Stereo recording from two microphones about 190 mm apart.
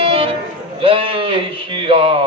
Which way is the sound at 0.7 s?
30° right (ahead or behind).